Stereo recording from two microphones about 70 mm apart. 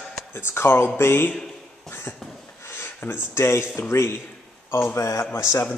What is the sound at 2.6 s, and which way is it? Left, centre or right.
Speech, left.